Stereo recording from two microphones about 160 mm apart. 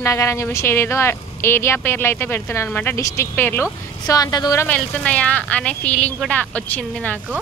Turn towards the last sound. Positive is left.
turn(degrees=10)  # may be behind; listen again after turning